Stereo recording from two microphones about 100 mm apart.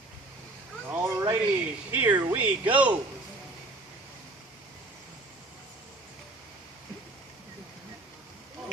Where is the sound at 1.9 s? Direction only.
15° right (ahead or behind).